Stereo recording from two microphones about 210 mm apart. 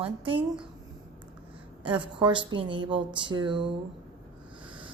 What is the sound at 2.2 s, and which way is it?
Speech, 20° right (ahead or behind).